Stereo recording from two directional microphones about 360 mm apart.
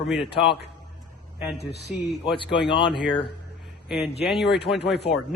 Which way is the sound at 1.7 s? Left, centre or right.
Left.